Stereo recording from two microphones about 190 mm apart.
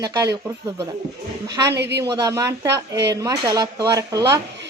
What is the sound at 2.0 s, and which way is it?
Speech, 15° right (ahead or behind).